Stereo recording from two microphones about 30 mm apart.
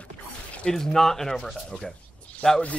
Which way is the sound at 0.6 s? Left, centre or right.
Centre.